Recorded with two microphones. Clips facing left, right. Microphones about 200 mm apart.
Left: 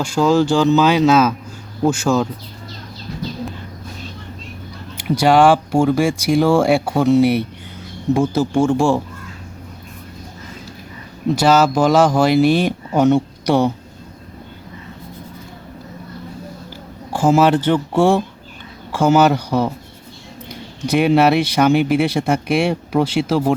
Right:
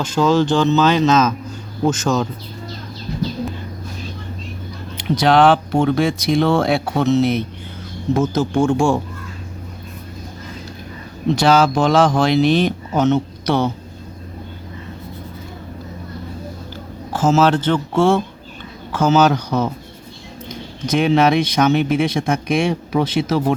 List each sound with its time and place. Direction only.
0.0 s speech: 10° left (ahead or behind)
4.9 s speech: 10° left (ahead or behind)
11.3 s speech: 5° left (ahead or behind)
17.1 s speech: 15° left (ahead or behind)
20.8 s speech: 10° left (ahead or behind)